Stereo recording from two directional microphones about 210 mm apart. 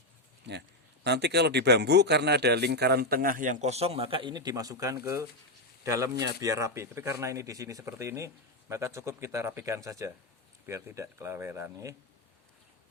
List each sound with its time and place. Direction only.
1.0 s a man's voice: 55° right (ahead or behind); by 11.9 s 15° right (ahead or behind)